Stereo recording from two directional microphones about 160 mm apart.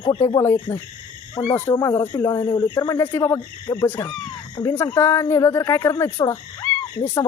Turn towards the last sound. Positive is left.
turn(degrees=15)  # may be behind; listen again after turning